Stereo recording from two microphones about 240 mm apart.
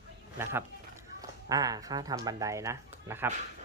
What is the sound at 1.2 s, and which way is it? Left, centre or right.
Speech, centre.